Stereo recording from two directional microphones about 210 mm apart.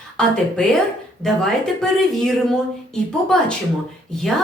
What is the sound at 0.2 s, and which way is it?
A woman's voice, 5° left (ahead or behind).